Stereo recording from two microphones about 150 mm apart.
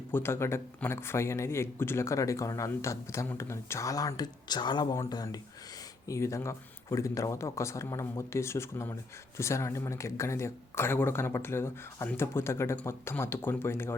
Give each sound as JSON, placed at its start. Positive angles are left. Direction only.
{"t": 0.1, "sound": "speech", "side_deg": 15}